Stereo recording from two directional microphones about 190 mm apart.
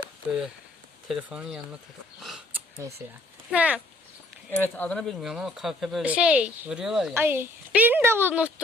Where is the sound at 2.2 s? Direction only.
Centre (ahead or behind).